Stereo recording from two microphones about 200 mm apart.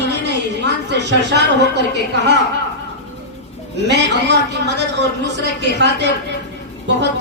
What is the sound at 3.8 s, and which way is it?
A man's voice, 60° right (ahead or behind).